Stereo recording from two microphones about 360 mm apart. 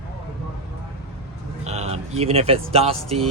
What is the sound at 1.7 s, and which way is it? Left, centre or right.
Speech, centre.